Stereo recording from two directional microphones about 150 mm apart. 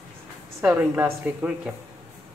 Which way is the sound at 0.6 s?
15° right (ahead or behind).